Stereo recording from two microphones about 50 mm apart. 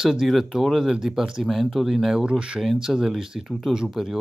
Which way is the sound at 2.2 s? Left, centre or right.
Centre.